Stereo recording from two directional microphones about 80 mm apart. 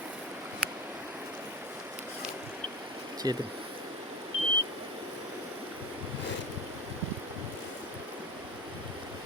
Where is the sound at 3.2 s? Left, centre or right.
Right.